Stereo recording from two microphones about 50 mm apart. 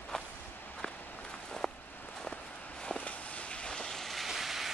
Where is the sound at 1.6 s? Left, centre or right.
Centre.